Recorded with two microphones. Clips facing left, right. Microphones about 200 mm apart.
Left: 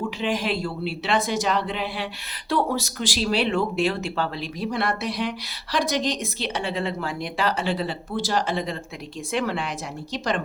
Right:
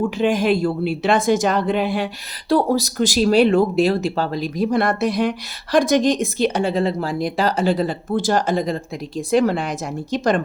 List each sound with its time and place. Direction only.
0.2 s speech: 45° right (ahead or behind)
2.5 s speech: 35° right (ahead or behind)